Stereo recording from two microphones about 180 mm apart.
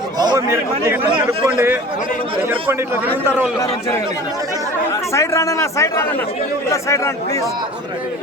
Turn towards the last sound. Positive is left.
turn(degrees=15)  # may be behind; listen again after turning